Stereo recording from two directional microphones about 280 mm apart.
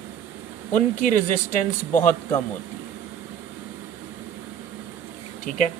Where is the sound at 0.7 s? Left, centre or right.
Left.